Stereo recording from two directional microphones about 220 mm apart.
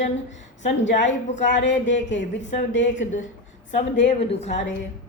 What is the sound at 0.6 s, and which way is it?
A woman's voice, 55° left (ahead or behind).